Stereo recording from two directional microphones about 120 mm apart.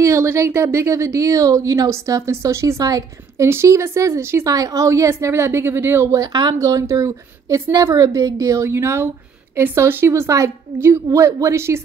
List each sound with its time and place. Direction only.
0.0 s speech: 25° right (ahead or behind)